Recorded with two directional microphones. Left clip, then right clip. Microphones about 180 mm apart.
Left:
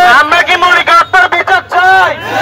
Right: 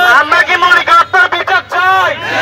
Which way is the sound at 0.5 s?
20° left (ahead or behind).